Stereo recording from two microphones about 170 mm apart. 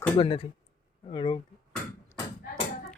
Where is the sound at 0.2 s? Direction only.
35° left (ahead or behind).